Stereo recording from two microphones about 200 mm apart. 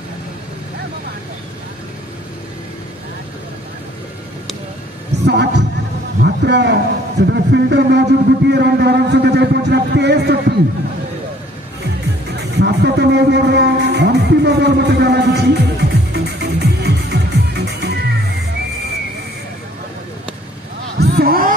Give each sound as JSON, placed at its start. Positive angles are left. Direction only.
{"t": 5.2, "sound": "music", "side_deg": -60}
{"t": 6.2, "sound": "a man's voice", "side_deg": -60}
{"t": 12.4, "sound": "music", "side_deg": -55}
{"t": 21.0, "sound": "a sound", "side_deg": -50}